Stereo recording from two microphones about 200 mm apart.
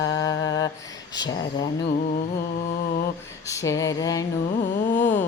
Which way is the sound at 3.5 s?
15° left (ahead or behind).